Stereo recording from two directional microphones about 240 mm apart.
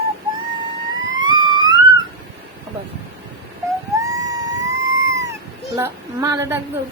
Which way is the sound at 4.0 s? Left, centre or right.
Centre.